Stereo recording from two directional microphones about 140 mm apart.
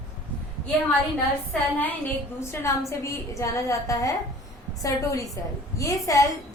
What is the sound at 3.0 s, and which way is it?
A woman's voice, 20° left (ahead or behind).